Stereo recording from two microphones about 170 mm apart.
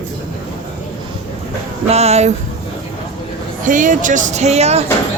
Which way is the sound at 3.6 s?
50° right (ahead or behind).